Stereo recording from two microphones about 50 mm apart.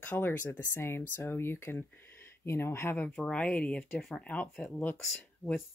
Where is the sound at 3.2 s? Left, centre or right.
Left.